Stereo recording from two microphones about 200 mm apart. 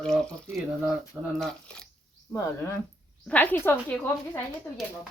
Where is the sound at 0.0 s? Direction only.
5° left (ahead or behind).